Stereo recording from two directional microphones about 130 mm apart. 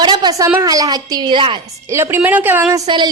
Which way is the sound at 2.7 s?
35° right (ahead or behind).